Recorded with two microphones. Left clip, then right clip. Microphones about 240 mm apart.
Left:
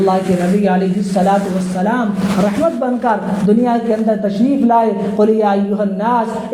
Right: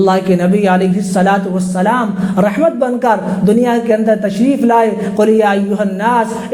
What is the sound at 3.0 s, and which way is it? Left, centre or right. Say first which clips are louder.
Speech: right 3 dB; right.